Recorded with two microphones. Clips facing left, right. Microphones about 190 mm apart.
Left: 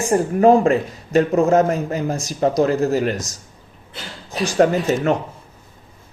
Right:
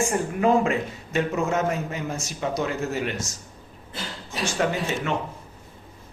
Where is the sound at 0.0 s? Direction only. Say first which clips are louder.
Left 8 dB; 35° left (ahead or behind).